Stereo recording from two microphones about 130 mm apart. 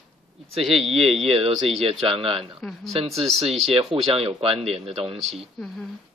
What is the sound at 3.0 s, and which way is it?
Speech, 50° right (ahead or behind).